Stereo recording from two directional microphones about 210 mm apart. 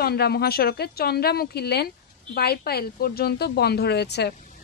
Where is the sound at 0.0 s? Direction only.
50° left (ahead or behind).